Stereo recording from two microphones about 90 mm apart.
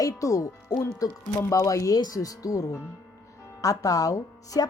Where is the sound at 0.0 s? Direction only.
35° left (ahead or behind).